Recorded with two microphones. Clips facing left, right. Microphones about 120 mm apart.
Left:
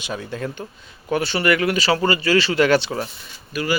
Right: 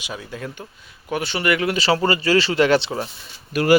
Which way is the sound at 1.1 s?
15° right (ahead or behind).